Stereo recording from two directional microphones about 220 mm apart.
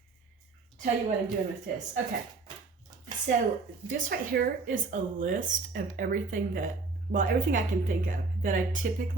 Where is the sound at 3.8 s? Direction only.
40° right (ahead or behind).